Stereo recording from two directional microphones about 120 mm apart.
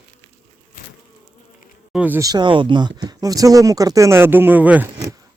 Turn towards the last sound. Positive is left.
turn(degrees=-15)  # may be behind; listen again after turning